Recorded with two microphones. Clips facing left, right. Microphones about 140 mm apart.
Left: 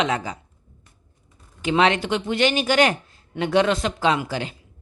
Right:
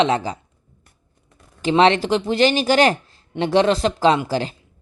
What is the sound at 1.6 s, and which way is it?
A woman's voice, 30° right (ahead or behind).